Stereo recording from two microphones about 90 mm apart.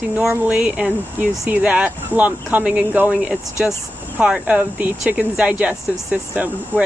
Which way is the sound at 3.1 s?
5° right (ahead or behind).